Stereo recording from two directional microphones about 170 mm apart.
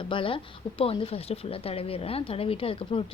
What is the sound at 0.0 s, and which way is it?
A woman's voice, 30° left (ahead or behind).